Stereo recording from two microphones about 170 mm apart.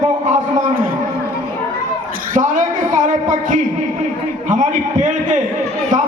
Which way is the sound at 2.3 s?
50° right (ahead or behind).